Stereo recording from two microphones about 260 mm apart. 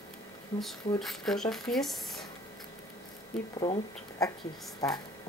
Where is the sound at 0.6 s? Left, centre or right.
Centre.